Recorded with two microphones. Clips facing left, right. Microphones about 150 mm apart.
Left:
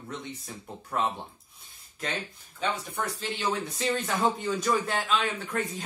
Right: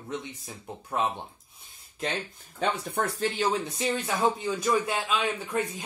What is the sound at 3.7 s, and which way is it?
Speech, 10° right (ahead or behind).